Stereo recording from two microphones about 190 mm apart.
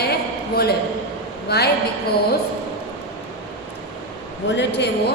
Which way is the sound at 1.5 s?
60° left (ahead or behind).